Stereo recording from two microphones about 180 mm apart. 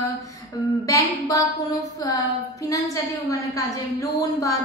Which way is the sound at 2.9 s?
20° left (ahead or behind).